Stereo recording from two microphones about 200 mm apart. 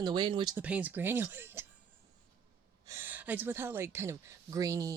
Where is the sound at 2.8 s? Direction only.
15° right (ahead or behind).